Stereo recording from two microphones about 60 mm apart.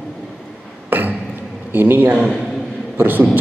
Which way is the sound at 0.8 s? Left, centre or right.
Right.